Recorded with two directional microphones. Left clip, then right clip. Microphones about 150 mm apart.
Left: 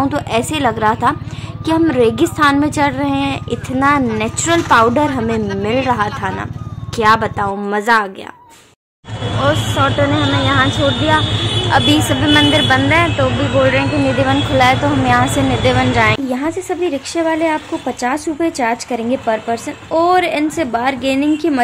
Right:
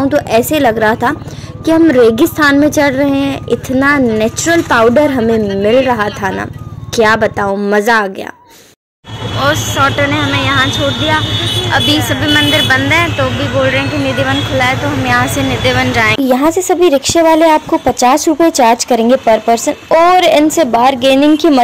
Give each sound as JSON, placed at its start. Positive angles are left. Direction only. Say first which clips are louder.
{"t": 0.1, "sound": "a woman's voice", "louder": "right 7 dB", "side_deg": -25}
{"t": 9.4, "sound": "speech", "louder": "right 4 dB", "side_deg": -5}
{"t": 11.7, "sound": "speech", "louder": "even", "side_deg": 15}
{"t": 14.1, "sound": "speech", "louder": "right 1 dB", "side_deg": 15}
{"t": 16.3, "sound": "speech", "louder": "right 9 dB", "side_deg": -50}